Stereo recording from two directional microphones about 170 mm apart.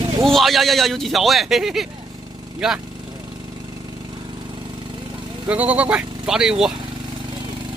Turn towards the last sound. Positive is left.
turn(degrees=-5)  # may be behind; listen again after turning